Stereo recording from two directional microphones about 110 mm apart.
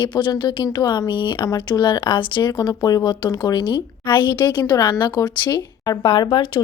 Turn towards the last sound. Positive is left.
turn(degrees=45)  # may be behind; listen again after turning